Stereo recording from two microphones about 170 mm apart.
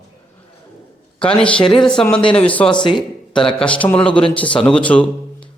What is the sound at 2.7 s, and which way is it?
Speech, 25° left (ahead or behind).